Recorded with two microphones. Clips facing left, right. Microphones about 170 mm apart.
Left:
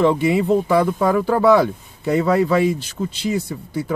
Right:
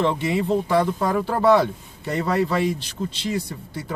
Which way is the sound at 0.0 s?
5° left (ahead or behind).